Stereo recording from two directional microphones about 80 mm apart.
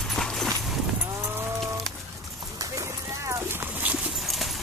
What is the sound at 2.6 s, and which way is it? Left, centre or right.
Clip-clop, right.